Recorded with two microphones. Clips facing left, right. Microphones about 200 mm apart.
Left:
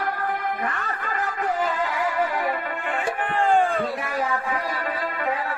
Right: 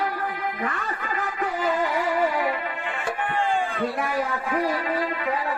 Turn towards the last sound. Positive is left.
turn(degrees=50)  # may be behind; listen again after turning